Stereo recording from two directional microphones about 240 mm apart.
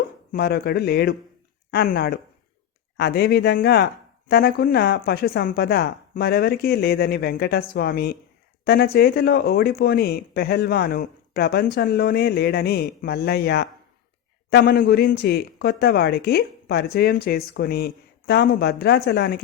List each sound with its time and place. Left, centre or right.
0.3 s speech: left